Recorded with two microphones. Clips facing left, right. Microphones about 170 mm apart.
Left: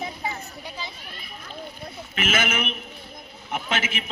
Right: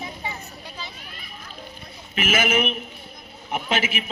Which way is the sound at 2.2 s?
15° right (ahead or behind).